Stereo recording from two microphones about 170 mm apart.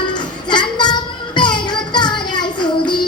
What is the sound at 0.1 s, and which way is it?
Child singing, 25° left (ahead or behind).